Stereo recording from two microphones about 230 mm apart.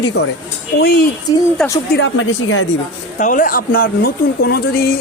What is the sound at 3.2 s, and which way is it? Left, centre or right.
Speech, left.